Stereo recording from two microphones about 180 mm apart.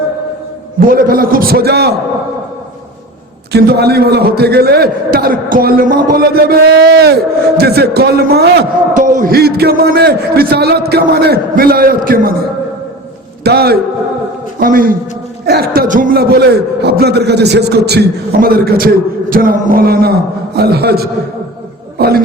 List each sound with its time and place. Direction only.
0.8 s a man's voice: 50° right (ahead or behind)
3.5 s a man's voice: 65° right (ahead or behind)
9.0 s a man's voice: 50° right (ahead or behind)
13.4 s a man's voice: 60° right (ahead or behind)